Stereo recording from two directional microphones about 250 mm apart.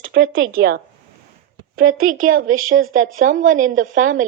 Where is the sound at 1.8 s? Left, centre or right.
Right.